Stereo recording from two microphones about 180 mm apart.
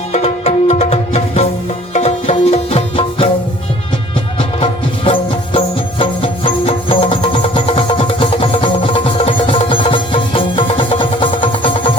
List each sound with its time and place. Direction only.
0.1 s music: 35° left (ahead or behind)
4.4 s music: 30° left (ahead or behind)